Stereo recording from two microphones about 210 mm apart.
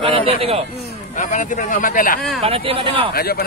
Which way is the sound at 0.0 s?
25° right (ahead or behind).